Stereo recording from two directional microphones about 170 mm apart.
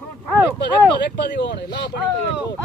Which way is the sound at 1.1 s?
90° left.